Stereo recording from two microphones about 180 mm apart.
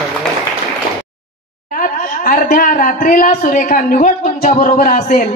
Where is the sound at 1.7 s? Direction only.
45° left (ahead or behind).